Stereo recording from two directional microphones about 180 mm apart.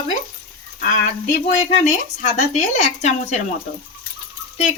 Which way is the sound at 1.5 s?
40° left (ahead or behind).